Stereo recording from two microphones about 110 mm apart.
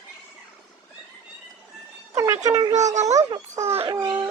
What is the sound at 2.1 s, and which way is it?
Speech, 30° right (ahead or behind).